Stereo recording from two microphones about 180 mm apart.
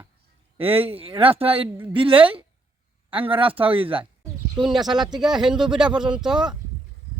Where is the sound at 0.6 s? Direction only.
30° right (ahead or behind).